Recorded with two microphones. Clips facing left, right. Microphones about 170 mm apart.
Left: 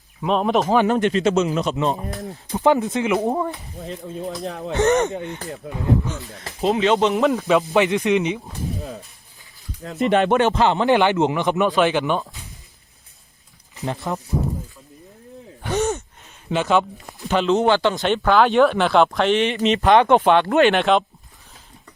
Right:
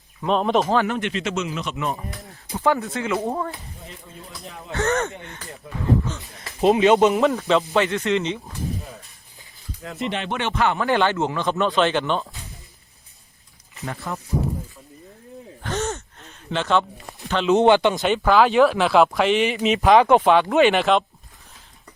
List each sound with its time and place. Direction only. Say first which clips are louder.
0.2 s speech: left 1 dB; centre (ahead or behind)
0.9 s speech: left 7 dB; 35° left (ahead or behind)
2.5 s speech: left 4 dB; 20° left (ahead or behind)
4.4 s speech: left 10 dB; 90° left
4.7 s speech: left 5 dB; 20° left (ahead or behind)
6.1 s speech: right 1 dB; 15° right (ahead or behind)
7.1 s speech: left 1 dB; centre (ahead or behind)
10.0 s speech: left 10 dB; 50° left (ahead or behind)
10.5 s speech: left 4 dB; 30° left (ahead or behind); by 12.2 s 10° left (ahead or behind)
13.8 s speech: left 4 dB; 20° left (ahead or behind)
15.6 s gasp: left 5 dB; 15° left (ahead or behind)
17.5 s speech: right 3 dB; 15° right (ahead or behind)
18.0 s speech: even; 5° right (ahead or behind)